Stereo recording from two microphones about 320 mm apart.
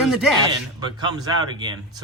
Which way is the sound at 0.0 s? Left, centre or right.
Centre.